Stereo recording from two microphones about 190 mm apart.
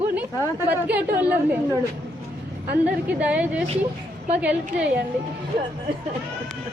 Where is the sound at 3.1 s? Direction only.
5° right (ahead or behind).